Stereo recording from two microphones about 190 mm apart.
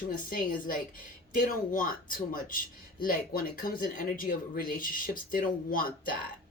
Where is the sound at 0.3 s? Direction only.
45° left (ahead or behind).